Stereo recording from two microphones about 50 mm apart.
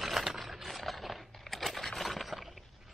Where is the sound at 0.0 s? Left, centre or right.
Centre.